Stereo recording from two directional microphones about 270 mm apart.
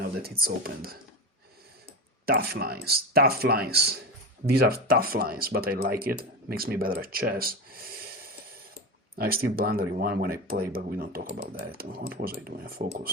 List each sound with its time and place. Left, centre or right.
0.2 s speech: right
2.2 s speech: right
9.1 s speech: right